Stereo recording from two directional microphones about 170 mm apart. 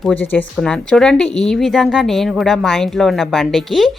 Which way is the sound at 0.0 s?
10° left (ahead or behind).